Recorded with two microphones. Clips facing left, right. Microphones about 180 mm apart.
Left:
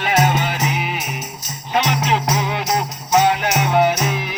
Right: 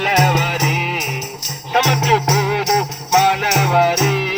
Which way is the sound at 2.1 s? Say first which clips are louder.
Right 4 dB; 75° right (ahead or behind).